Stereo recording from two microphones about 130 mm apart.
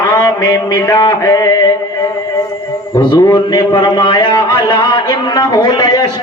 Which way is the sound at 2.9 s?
30° left (ahead or behind).